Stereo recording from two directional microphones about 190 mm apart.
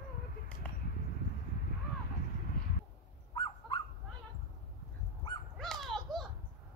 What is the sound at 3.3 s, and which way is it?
Dog, 25° left (ahead or behind).